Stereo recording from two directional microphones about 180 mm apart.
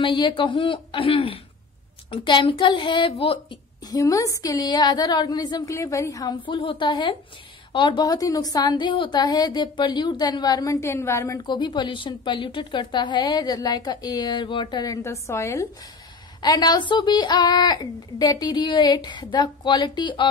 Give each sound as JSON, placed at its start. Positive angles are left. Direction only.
{"t": 0.0, "sound": "a woman's voice", "side_deg": 25}